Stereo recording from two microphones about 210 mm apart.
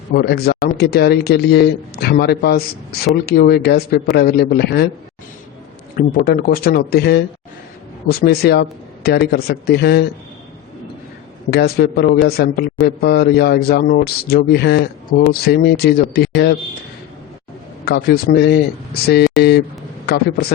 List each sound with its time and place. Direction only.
0.1 s a man's voice: 50° left (ahead or behind)
6.0 s a man's voice: 45° left (ahead or behind)
8.2 s a man's voice: 45° left (ahead or behind)
11.5 s a man's voice: 50° left (ahead or behind)
17.8 s a man's voice: 50° left (ahead or behind)